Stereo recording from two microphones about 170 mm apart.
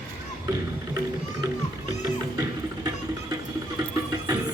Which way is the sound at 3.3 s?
20° right (ahead or behind).